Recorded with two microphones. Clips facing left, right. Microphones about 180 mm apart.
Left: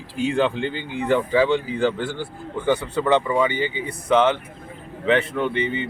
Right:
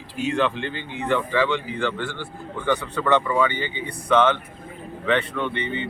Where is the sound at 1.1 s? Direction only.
40° left (ahead or behind).